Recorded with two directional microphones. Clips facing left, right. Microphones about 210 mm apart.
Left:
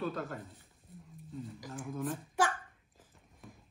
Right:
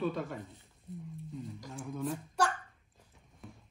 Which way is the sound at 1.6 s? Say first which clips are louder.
Even; centre (ahead or behind).